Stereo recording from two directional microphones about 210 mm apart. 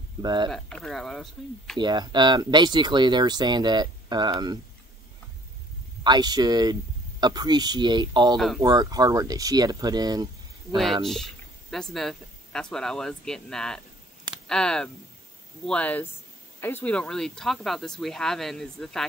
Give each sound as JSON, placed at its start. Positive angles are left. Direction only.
{"t": 0.2, "sound": "speech", "side_deg": -20}
{"t": 0.5, "sound": "speech", "side_deg": 5}
{"t": 1.8, "sound": "speech", "side_deg": -20}
{"t": 6.0, "sound": "speech", "side_deg": -20}
{"t": 10.8, "sound": "speech", "side_deg": 0}